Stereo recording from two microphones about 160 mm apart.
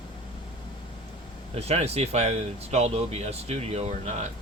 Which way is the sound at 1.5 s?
40° right (ahead or behind).